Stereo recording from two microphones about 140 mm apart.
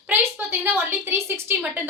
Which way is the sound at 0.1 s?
15° right (ahead or behind).